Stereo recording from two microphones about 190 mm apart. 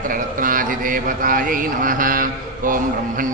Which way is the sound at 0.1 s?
45° right (ahead or behind).